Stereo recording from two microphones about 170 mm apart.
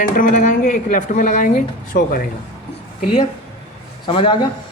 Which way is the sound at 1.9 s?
60° left (ahead or behind).